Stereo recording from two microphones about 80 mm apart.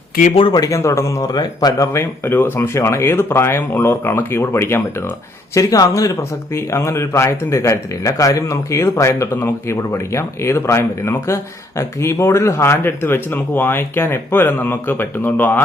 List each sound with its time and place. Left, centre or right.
0.8 s speech: left
1.3 s speech: left
1.9 s speech: left
5.5 s speech: left